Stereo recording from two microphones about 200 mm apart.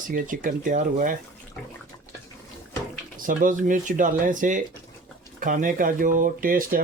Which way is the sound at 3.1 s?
40° right (ahead or behind).